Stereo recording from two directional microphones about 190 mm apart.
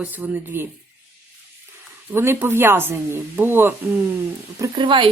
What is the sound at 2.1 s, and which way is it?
Speech, 10° right (ahead or behind).